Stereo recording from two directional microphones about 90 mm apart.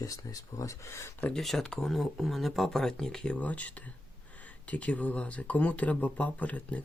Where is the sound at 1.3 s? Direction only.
5° left (ahead or behind).